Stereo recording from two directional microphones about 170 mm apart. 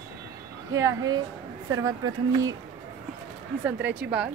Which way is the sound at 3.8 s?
85° right.